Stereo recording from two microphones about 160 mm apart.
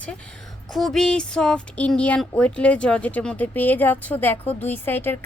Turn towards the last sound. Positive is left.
turn(degrees=15)  # may be behind; listen again after turning